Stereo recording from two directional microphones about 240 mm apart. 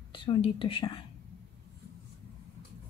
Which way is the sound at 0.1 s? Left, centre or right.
Left.